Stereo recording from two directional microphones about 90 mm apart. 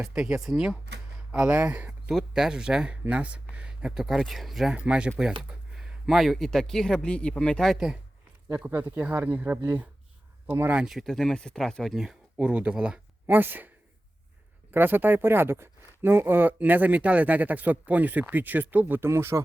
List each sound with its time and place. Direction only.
0.0 s speech: 10° right (ahead or behind)
1.3 s speech: 20° right (ahead or behind); by 7.7 s 10° left (ahead or behind)
7.7 s speech: 5° right (ahead or behind)
8.6 s speech: 20° right (ahead or behind)
10.8 s speech: centre (ahead or behind)
13.2 s speech: 20° right (ahead or behind)
14.7 s speech: 20° right (ahead or behind)